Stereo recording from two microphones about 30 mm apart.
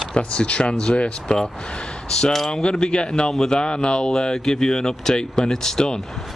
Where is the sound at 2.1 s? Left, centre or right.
Left.